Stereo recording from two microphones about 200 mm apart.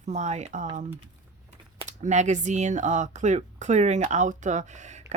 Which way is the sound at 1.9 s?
35° right (ahead or behind).